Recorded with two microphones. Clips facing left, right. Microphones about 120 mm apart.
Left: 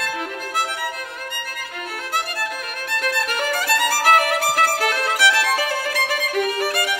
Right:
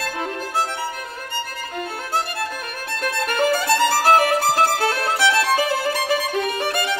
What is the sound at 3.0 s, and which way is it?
Music, 30° right (ahead or behind).